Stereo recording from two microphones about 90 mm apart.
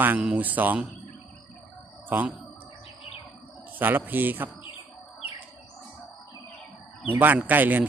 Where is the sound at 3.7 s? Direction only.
20° right (ahead or behind).